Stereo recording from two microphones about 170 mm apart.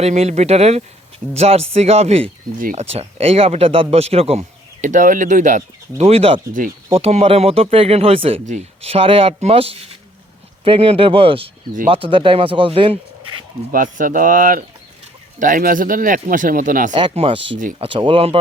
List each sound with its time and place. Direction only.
0.0 s speech: 40° right (ahead or behind)
6.0 s speech: 35° right (ahead or behind)
6.5 s speech: 55° right (ahead or behind)
6.9 s speech: 40° right (ahead or behind)
13.7 s speech: 50° right (ahead or behind)
16.9 s speech: 30° right (ahead or behind)